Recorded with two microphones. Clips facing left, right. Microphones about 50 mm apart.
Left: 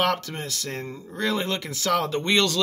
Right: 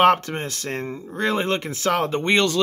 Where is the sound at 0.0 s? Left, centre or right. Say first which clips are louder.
Right 8 dB; right.